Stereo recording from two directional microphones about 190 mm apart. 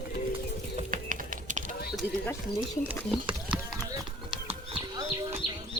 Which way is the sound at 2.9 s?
5° right (ahead or behind).